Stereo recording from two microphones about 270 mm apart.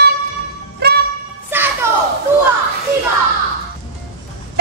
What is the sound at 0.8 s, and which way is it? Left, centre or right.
Music, right.